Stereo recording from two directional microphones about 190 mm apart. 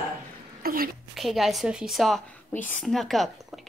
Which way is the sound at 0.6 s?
50° right (ahead or behind).